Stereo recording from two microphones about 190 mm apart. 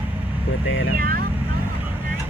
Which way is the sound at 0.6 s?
85° left.